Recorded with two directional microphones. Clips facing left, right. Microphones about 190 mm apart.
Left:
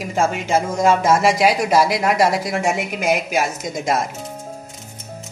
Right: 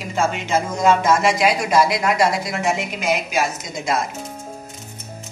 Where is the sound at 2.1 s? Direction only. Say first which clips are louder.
Left 2 dB; 15° left (ahead or behind).